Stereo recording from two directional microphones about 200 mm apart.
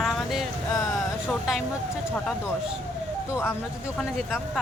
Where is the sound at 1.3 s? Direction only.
Centre (ahead or behind).